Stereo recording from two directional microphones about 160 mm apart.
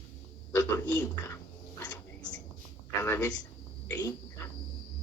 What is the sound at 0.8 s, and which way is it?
Speech, 10° left (ahead or behind).